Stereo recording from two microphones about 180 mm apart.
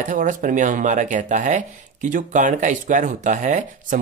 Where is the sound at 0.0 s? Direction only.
45° right (ahead or behind).